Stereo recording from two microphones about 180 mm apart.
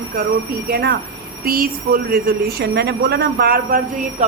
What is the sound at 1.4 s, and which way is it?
A woman's voice, 55° right (ahead or behind).